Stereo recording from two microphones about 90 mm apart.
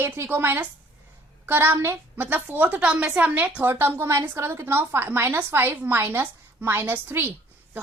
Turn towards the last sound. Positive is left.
turn(degrees=-20)  # may be behind; listen again after turning